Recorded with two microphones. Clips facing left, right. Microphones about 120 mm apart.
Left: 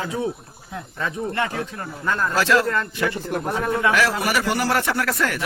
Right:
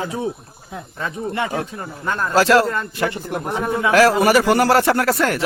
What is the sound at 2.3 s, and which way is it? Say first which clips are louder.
Speech: right 6 dB; 35° right (ahead or behind).